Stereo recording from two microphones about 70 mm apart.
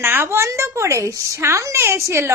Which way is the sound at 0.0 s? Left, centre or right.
Right.